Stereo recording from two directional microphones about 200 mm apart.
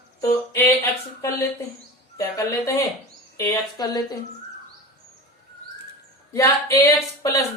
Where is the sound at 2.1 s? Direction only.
15° left (ahead or behind).